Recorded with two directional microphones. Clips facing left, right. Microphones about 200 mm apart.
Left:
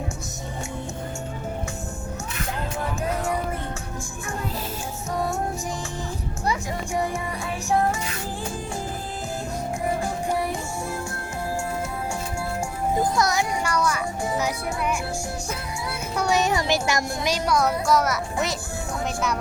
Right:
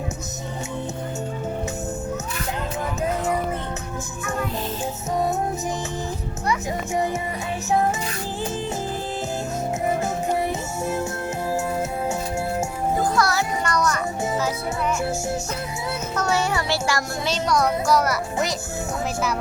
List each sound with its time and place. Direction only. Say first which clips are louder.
6.9 s music: right 2 dB; 20° right (ahead or behind)
10.0 s music: right 2 dB; 20° right (ahead or behind)
13.0 s music: right 1 dB; 20° left (ahead or behind)
13.7 s music: right 1 dB; 10° left (ahead or behind)
16.1 s a child's voice: left 2 dB; 20° left (ahead or behind); by 18.2 s centre (ahead or behind)